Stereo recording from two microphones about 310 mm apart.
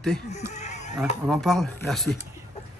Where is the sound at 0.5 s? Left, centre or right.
Left.